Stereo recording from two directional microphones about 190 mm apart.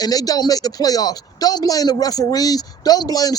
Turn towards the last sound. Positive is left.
turn(degrees=20)  # may be behind; listen again after turning